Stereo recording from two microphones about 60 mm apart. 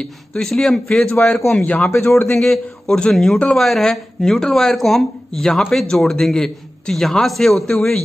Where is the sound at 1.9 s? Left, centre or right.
Left.